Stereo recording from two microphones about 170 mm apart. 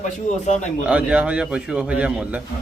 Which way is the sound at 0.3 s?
50° left (ahead or behind).